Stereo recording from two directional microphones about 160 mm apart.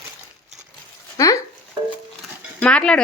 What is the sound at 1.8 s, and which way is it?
Music, 30° right (ahead or behind).